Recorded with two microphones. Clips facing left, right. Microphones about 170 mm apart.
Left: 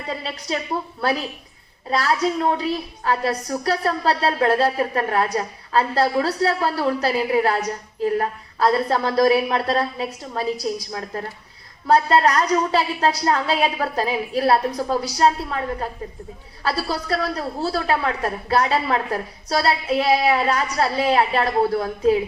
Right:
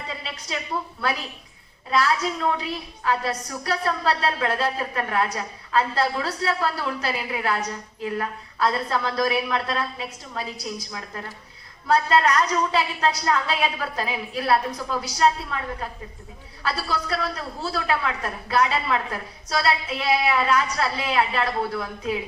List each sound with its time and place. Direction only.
0.1 s a woman's voice: 40° left (ahead or behind)
1.9 s a woman's voice: 35° left (ahead or behind)